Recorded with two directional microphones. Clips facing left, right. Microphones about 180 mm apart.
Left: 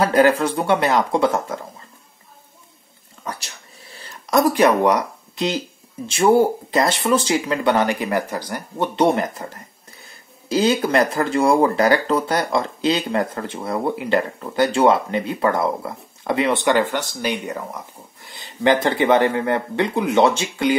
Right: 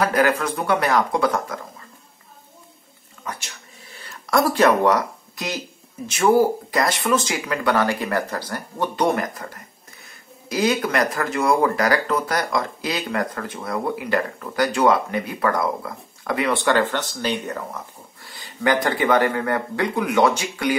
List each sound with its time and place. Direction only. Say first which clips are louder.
0.0 s speech: left 4 dB; 25° left (ahead or behind)
3.3 s a sound: left 2 dB; 35° left (ahead or behind)
4.3 s speech: left 2 dB; 15° left (ahead or behind)